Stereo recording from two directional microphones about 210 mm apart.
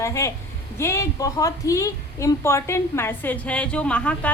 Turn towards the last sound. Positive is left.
turn(degrees=5)  # may be behind; listen again after turning